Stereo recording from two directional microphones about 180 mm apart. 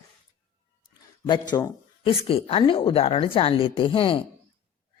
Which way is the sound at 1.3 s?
20° left (ahead or behind).